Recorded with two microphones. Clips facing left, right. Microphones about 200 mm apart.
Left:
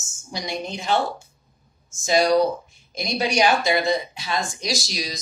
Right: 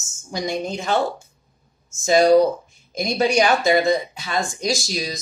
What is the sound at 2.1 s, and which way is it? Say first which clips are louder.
Speech: right 4 dB; 50° right (ahead or behind).